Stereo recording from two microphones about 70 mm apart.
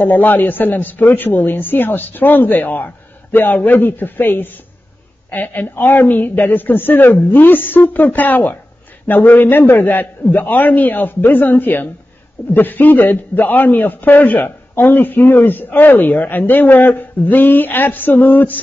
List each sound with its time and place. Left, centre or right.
0.0 s a man's voice: left